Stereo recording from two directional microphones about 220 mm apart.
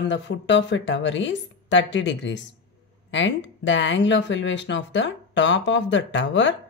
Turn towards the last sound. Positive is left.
turn(degrees=55)  # may be behind; listen again after turning